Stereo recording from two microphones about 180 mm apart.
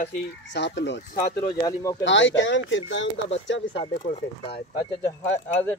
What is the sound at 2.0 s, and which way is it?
Speech, 90° left.